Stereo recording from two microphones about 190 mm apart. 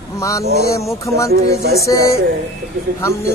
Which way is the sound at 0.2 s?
15° left (ahead or behind).